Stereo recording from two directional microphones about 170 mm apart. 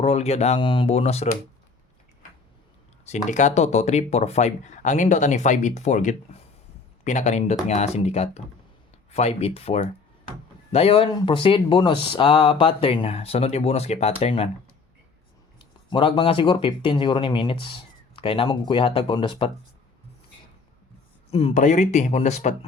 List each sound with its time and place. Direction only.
0.0 s speech: 35° left (ahead or behind)
0.6 s speech: 30° left (ahead or behind)
3.1 s speech: 45° left (ahead or behind)
15.5 s speech: 30° left (ahead or behind)
21.2 s speech: 35° left (ahead or behind)